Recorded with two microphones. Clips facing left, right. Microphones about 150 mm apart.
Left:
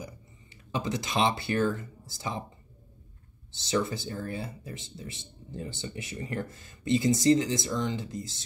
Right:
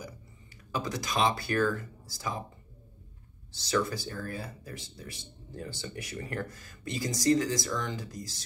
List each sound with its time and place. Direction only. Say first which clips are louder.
0.7 s speech: left 2 dB; 25° left (ahead or behind)
3.5 s speech: left 1 dB; 25° left (ahead or behind)